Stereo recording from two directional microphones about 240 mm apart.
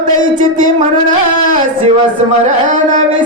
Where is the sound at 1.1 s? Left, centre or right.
Right.